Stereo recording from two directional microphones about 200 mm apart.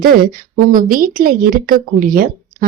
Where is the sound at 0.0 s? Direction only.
45° right (ahead or behind).